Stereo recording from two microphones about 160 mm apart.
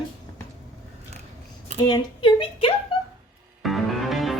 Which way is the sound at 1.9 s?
30° left (ahead or behind).